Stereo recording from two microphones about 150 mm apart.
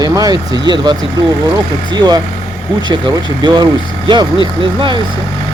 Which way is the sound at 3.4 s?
30° right (ahead or behind).